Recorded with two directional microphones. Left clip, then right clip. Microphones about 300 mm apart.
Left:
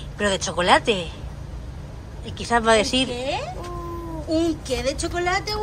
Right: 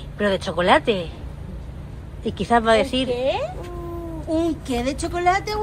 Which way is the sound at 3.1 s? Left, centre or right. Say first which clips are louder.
Right 5 dB; centre.